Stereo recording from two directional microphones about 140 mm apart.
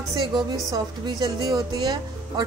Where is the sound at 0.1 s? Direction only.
30° right (ahead or behind).